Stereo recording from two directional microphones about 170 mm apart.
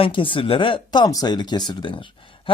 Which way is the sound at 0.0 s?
30° left (ahead or behind).